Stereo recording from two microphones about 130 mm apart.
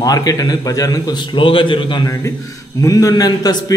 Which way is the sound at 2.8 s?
25° left (ahead or behind).